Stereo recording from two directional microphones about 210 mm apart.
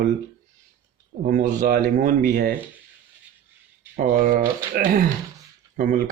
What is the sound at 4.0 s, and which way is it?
A man's voice, 40° right (ahead or behind).